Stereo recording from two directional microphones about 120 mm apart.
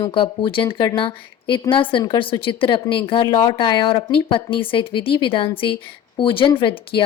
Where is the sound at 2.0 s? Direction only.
35° left (ahead or behind).